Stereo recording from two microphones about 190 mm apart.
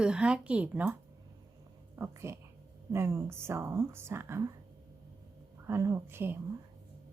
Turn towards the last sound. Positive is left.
turn(degrees=-10)  # may be behind; listen again after turning